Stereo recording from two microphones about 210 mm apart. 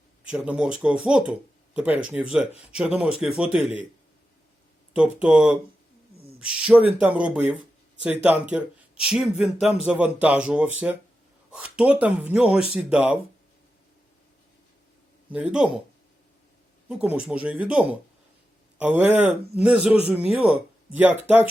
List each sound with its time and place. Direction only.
0.3 s speech: 5° right (ahead or behind)
4.9 s speech: 5° right (ahead or behind)
15.3 s speech: 5° right (ahead or behind)
16.9 s speech: 5° right (ahead or behind)